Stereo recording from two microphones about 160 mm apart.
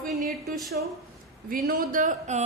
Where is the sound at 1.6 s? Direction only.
60° right (ahead or behind).